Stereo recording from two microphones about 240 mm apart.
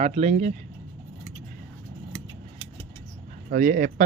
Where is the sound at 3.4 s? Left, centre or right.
Right.